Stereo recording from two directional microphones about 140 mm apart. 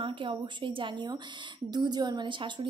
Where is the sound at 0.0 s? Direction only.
40° right (ahead or behind).